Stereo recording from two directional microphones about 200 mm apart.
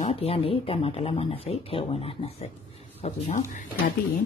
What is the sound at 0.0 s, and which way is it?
Speech, 30° left (ahead or behind).